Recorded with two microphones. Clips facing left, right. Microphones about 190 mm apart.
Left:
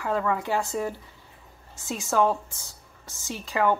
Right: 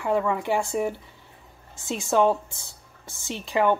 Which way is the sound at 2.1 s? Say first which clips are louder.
Right 3 dB; 20° right (ahead or behind).